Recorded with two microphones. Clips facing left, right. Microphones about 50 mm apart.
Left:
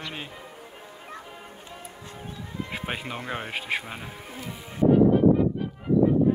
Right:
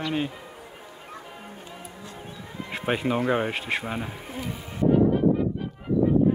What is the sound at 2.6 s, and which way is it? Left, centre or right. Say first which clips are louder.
Music: right 9 dB; centre.